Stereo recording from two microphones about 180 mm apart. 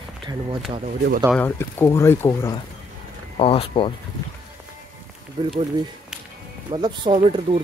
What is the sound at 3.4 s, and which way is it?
Speech, 30° left (ahead or behind).